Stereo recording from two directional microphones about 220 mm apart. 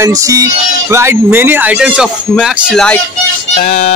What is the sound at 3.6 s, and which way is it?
Speech, 30° left (ahead or behind).